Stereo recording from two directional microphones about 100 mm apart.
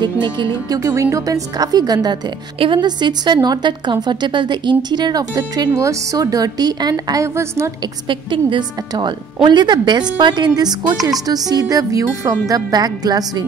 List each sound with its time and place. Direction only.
0.0 s a woman's voice: 50° right (ahead or behind)
0.7 s a woman's voice: 25° right (ahead or behind)
7.8 s a woman's voice: 55° right (ahead or behind)